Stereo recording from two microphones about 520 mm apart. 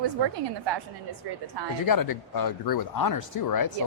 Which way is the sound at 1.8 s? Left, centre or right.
Left.